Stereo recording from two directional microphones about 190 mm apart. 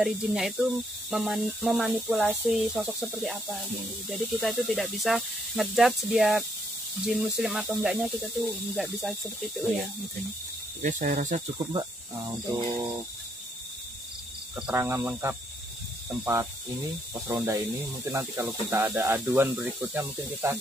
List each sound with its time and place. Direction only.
0.0 s speech: centre (ahead or behind)
10.8 s cricket: 45° right (ahead or behind)
11.5 s speech: 25° right (ahead or behind)
14.5 s speech: 10° right (ahead or behind)
17.1 s speech: 10° right (ahead or behind)